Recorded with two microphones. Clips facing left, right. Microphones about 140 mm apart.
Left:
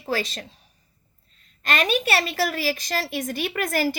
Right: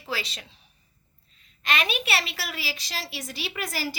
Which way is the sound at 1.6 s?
45° left (ahead or behind).